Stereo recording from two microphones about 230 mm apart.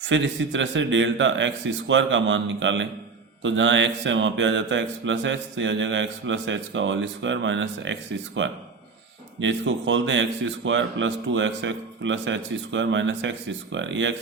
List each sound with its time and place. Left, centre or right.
0.1 s speech: right